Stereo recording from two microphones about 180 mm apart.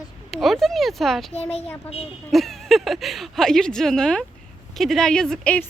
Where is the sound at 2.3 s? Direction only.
Centre (ahead or behind).